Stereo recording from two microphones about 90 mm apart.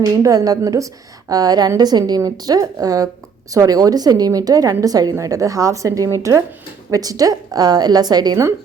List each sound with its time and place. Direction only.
0.0 s a woman's voice: 40° right (ahead or behind)